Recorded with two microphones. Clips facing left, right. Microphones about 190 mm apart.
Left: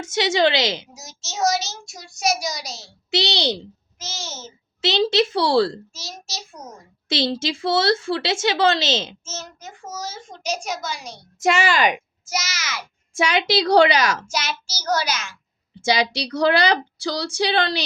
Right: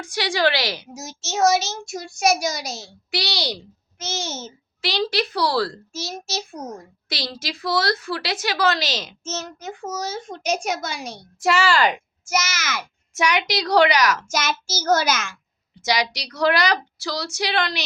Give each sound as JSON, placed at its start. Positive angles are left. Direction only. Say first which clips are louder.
{"t": 0.0, "sound": "a woman's voice", "louder": "left 3 dB", "side_deg": 25}
{"t": 0.9, "sound": "a child's voice", "louder": "right 4 dB", "side_deg": -55}
{"t": 3.1, "sound": "a woman's voice", "louder": "left 5 dB", "side_deg": 25}
{"t": 3.9, "sound": "a child's voice", "louder": "right 6 dB", "side_deg": -60}
{"t": 4.8, "sound": "a woman's voice", "louder": "left 5 dB", "side_deg": 25}
{"t": 5.9, "sound": "a child's voice", "louder": "right 7 dB", "side_deg": -60}
{"t": 7.1, "sound": "a woman's voice", "louder": "left 8 dB", "side_deg": 25}
{"t": 9.2, "sound": "a child's voice", "louder": "right 5 dB", "side_deg": -65}
{"t": 11.3, "sound": "a woman's voice", "louder": "even", "side_deg": 20}
{"t": 12.3, "sound": "a child's voice", "louder": "right 4 dB", "side_deg": -55}
{"t": 13.1, "sound": "a woman's voice", "louder": "left 2 dB", "side_deg": 30}
{"t": 14.3, "sound": "child singing", "louder": "right 3 dB", "side_deg": -50}
{"t": 15.8, "sound": "speech", "louder": "left 3 dB", "side_deg": 30}